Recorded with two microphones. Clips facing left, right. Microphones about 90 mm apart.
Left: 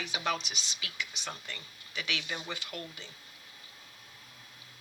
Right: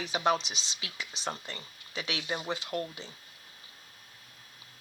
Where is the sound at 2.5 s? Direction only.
35° right (ahead or behind).